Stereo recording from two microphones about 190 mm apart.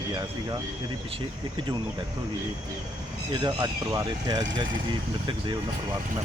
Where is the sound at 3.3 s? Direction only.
20° right (ahead or behind).